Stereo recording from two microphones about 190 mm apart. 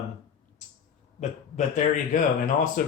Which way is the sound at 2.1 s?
45° left (ahead or behind).